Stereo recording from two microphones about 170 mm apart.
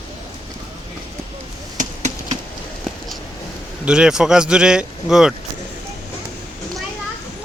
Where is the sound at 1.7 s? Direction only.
40° right (ahead or behind).